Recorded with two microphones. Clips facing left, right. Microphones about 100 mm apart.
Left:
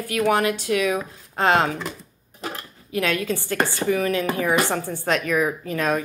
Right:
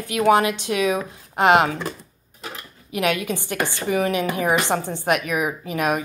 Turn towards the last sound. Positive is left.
turn(degrees=-15)  # may be behind; listen again after turning